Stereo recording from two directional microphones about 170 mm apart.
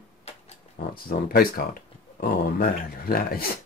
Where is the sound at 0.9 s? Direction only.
60° left (ahead or behind).